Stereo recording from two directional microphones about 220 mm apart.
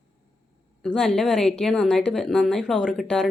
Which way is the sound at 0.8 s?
5° left (ahead or behind).